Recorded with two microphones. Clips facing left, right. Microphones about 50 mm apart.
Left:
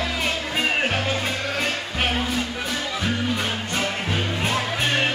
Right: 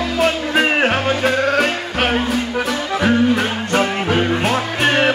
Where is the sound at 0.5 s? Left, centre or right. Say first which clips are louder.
Right 6 dB; right.